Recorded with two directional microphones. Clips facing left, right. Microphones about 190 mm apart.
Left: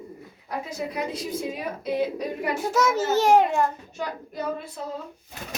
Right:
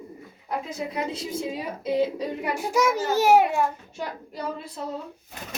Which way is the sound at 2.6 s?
10° right (ahead or behind).